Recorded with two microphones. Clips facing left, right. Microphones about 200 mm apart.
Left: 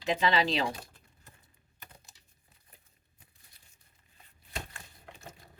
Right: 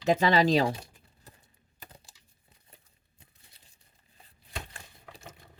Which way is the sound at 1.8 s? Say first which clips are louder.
Right 3 dB; 30° right (ahead or behind).